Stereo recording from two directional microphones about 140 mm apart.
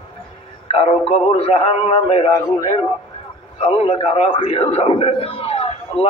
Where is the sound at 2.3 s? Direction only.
25° left (ahead or behind).